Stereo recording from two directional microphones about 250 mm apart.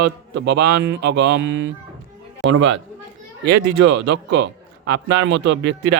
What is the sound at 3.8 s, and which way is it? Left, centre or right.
Mantra, right.